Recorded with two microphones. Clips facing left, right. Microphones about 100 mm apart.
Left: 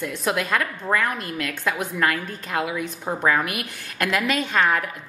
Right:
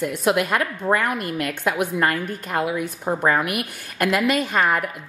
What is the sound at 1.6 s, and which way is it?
A woman's voice, 10° right (ahead or behind).